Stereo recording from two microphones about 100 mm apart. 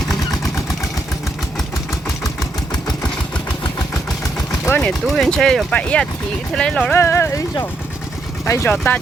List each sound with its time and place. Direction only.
2.2 s engine: 35° left (ahead or behind)
4.8 s speech: 5° left (ahead or behind)
7.0 s speech: 25° left (ahead or behind)
8.4 s speech: 25° left (ahead or behind)